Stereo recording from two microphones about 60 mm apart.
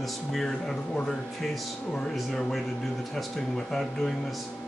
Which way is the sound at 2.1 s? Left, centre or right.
Centre.